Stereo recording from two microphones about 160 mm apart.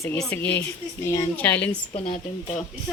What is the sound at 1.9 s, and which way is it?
Speech, 40° left (ahead or behind).